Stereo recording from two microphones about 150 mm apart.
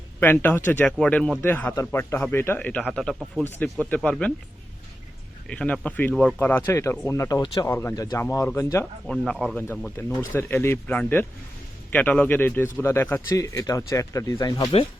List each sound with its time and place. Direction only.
0.2 s speech: 15° left (ahead or behind)
5.5 s speech: 5° left (ahead or behind)
9.0 s speech: 5° left (ahead or behind)
10.0 s speech: 15° left (ahead or behind)